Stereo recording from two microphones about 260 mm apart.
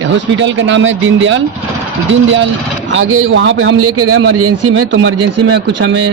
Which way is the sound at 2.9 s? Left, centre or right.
Right.